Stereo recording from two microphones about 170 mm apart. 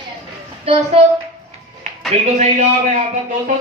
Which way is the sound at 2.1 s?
40° right (ahead or behind).